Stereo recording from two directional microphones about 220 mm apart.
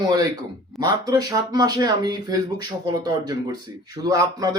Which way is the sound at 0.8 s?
15° right (ahead or behind).